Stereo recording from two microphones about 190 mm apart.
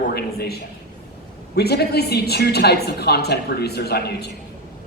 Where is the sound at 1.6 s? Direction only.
60° left (ahead or behind).